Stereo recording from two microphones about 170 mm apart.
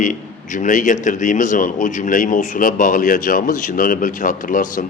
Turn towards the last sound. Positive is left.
turn(degrees=50)  # may be behind; listen again after turning